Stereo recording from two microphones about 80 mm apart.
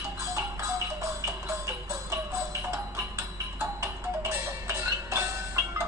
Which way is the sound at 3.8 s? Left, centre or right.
Right.